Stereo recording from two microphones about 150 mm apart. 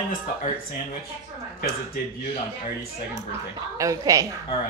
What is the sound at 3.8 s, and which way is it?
Speech, 20° right (ahead or behind).